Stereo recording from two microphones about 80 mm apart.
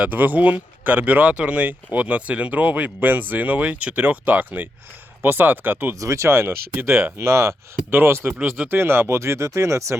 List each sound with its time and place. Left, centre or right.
0.0 s speech: right
6.0 s speech: right